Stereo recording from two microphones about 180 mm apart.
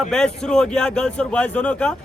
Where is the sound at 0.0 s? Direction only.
5° left (ahead or behind).